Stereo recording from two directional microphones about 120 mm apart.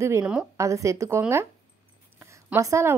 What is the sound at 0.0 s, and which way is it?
A woman's voice, 25° right (ahead or behind).